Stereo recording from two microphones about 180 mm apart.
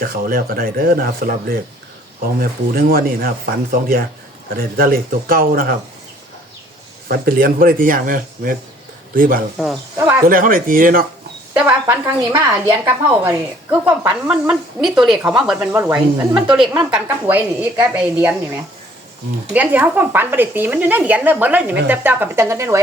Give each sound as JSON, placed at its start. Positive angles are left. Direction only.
{"t": 0.0, "sound": "speech", "side_deg": -55}
{"t": 7.1, "sound": "speech", "side_deg": -55}
{"t": 11.5, "sound": "a woman's voice", "side_deg": -10}
{"t": 16.3, "sound": "a woman's voice", "side_deg": -5}